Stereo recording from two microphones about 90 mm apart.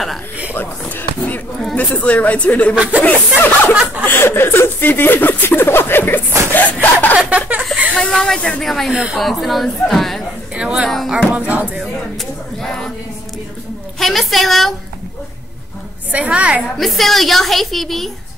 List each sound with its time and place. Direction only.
0.6 s a sound: 20° left (ahead or behind)
1.8 s a woman's voice: 15° left (ahead or behind)
2.7 s a woman's voice: 10° right (ahead or behind)
3.0 s speech: 20° left (ahead or behind)
6.5 s snicker: 20° left (ahead or behind)
7.2 s chuckle: 10° right (ahead or behind)
7.9 s speech: 5° left (ahead or behind)
8.9 s a woman's voice: 10° right (ahead or behind)
9.2 s a woman's voice: centre (ahead or behind)
10.5 s a woman's voice: 10° right (ahead or behind)
12.6 s a woman's voice: 5° left (ahead or behind)
13.9 s a woman's voice: centre (ahead or behind)
16.1 s a woman's voice: 15° right (ahead or behind)
16.7 s a woman's voice: centre (ahead or behind)